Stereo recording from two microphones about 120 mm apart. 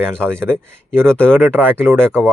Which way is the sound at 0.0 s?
10° left (ahead or behind).